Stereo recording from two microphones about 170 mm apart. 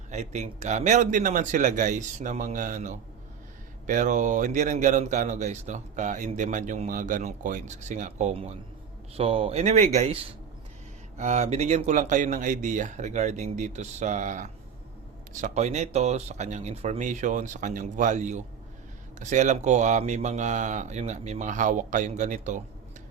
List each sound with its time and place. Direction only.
0.1 s speech: 45° right (ahead or behind)
11.2 s speech: 40° right (ahead or behind)